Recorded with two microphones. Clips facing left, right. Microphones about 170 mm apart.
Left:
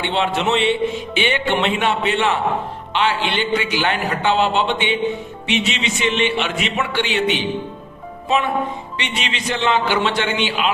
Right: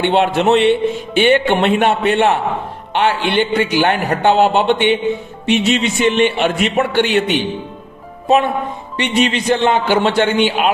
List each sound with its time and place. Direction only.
0.0 s a man's voice: 55° right (ahead or behind)
9.0 s a man's voice: 50° right (ahead or behind)